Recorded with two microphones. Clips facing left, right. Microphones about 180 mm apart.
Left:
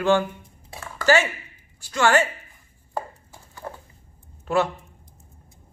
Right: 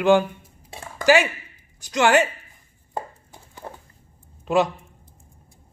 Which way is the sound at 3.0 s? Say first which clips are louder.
Left 1 dB; 20° right (ahead or behind).